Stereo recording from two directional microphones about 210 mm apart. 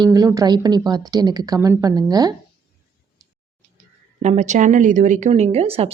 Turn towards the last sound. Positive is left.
turn(degrees=-30)  # may be behind; listen again after turning